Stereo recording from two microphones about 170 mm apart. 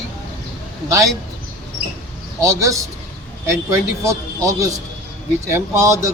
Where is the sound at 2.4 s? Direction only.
20° right (ahead or behind).